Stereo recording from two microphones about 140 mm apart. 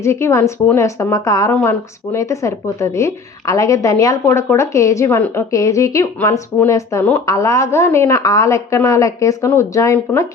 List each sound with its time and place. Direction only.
0.0 s a woman's voice: 20° left (ahead or behind)